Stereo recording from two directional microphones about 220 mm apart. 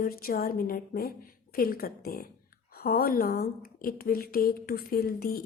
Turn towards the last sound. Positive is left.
turn(degrees=40)  # may be behind; listen again after turning